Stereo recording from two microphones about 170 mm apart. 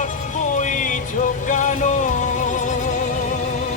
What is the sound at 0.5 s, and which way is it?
Music, 50° left (ahead or behind).